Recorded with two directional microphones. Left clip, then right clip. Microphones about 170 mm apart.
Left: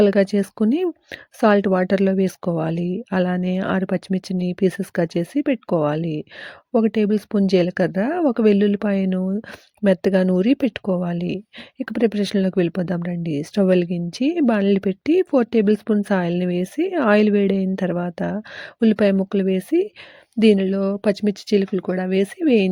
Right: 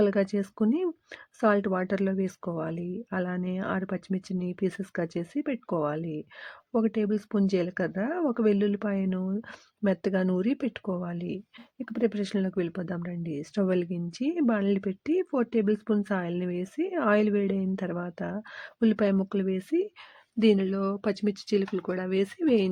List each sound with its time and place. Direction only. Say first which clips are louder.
0.0 s speech: left 9 dB; 35° left (ahead or behind)